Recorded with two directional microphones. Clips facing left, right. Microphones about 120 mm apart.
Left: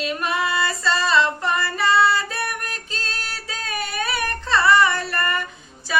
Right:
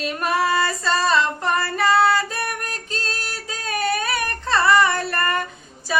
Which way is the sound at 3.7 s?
45° right (ahead or behind).